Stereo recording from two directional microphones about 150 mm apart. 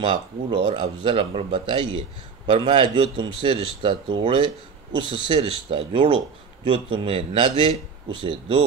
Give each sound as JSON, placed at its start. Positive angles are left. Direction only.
{"t": 0.0, "sound": "speech", "side_deg": -35}